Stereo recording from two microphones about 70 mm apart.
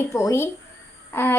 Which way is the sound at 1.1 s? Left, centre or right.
Left.